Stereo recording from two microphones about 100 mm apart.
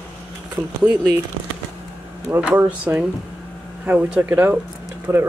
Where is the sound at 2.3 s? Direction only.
15° right (ahead or behind).